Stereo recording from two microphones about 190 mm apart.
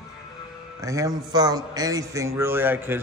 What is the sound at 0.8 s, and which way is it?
A man's voice, 15° right (ahead or behind).